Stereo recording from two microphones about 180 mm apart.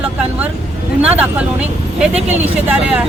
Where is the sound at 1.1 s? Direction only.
5° right (ahead or behind).